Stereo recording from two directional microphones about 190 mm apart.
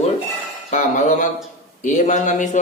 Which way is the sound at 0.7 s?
40° left (ahead or behind).